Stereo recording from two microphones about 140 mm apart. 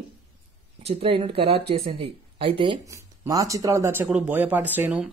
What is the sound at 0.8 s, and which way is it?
Speech, 40° right (ahead or behind).